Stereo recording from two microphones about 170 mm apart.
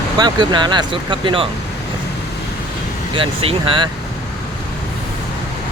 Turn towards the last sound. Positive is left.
turn(degrees=-30)  # may be behind; listen again after turning